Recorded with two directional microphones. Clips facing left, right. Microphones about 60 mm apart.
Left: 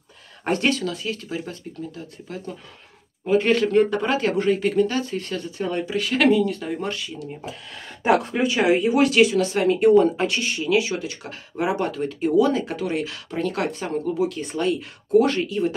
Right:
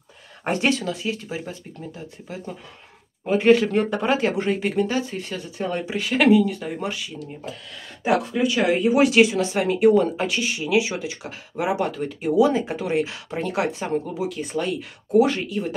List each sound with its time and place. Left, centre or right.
0.4 s speech: centre
5.9 s speech: right
6.1 s speech: centre
8.0 s speech: left
8.7 s speech: centre
9.2 s speech: right
9.5 s speech: centre
11.5 s speech: centre
14.2 s speech: centre